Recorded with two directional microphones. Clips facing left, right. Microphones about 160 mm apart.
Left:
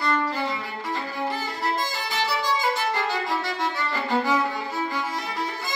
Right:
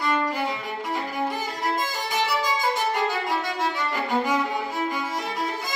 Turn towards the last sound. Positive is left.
turn(degrees=-15)  # may be behind; listen again after turning